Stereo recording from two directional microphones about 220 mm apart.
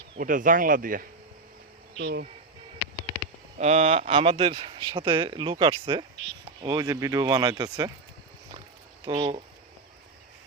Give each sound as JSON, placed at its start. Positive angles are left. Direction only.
{"t": 0.2, "sound": "speech", "side_deg": -40}
{"t": 2.0, "sound": "speech", "side_deg": -55}
{"t": 3.6, "sound": "speech", "side_deg": -30}
{"t": 9.0, "sound": "speech", "side_deg": -20}